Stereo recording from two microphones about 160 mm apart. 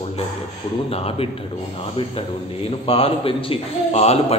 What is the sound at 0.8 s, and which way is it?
Speech, 40° left (ahead or behind).